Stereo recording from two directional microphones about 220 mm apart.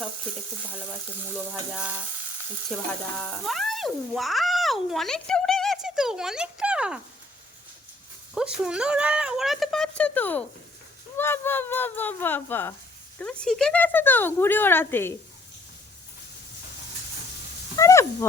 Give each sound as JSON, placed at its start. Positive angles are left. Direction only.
{"t": 2.7, "sound": "speech", "side_deg": 5}
{"t": 8.4, "sound": "speech", "side_deg": -5}
{"t": 17.7, "sound": "speech", "side_deg": 15}